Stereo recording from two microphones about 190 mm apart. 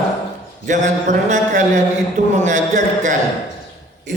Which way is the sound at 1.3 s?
40° right (ahead or behind).